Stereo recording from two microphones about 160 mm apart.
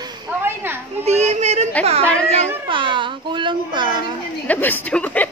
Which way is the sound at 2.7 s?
30° right (ahead or behind).